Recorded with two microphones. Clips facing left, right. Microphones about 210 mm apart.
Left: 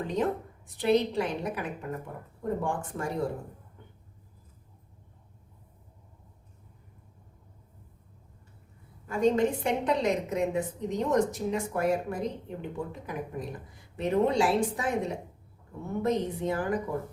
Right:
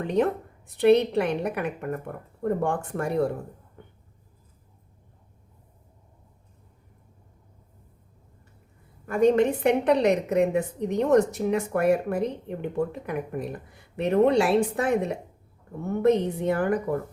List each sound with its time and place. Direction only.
0.8 s a woman's voice: 65° right (ahead or behind)
3.8 s vehicle: 60° right (ahead or behind)
9.0 s a woman's voice: 60° right (ahead or behind)